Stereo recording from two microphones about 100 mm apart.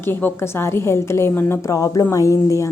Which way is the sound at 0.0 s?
20° left (ahead or behind).